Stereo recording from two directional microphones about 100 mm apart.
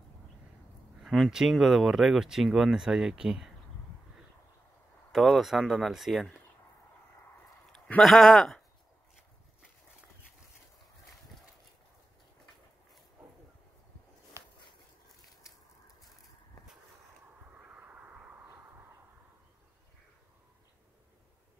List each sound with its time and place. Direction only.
1.0 s speech: 5° right (ahead or behind)
5.1 s speech: centre (ahead or behind)
8.0 s speech: 5° left (ahead or behind)
14.3 s a sound: 25° right (ahead or behind)
17.6 s crow: 15° right (ahead or behind)